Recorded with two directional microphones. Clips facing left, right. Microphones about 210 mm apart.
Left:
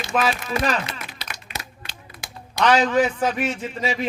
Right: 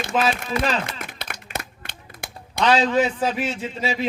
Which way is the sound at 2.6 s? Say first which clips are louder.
Left 1 dB; 25° right (ahead or behind).